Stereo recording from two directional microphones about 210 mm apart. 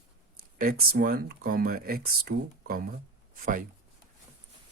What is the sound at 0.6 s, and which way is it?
Speech, 45° right (ahead or behind).